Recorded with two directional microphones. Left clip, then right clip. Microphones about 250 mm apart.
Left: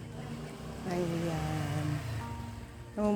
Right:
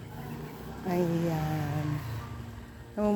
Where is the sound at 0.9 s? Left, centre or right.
Centre.